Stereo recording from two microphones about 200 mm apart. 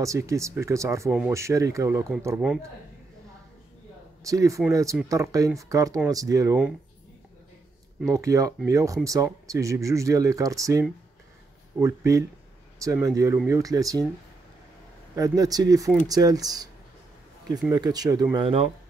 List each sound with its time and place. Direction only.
0.0 s speech: 15° right (ahead or behind)
4.2 s speech: 15° right (ahead or behind)
8.1 s speech: 15° right (ahead or behind)
15.1 s speech: 15° right (ahead or behind)
17.6 s speech: 20° right (ahead or behind)